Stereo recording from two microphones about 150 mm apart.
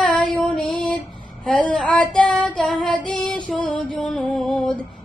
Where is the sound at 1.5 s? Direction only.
5° left (ahead or behind).